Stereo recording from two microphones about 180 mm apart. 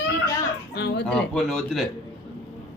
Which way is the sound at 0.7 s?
65° left (ahead or behind).